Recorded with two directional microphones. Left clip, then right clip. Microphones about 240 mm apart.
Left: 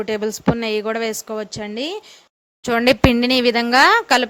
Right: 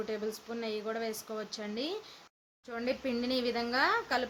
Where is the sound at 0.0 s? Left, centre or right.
Left.